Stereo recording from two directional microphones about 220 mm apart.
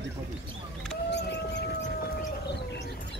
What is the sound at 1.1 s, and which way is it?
Civil defense siren, 50° left (ahead or behind).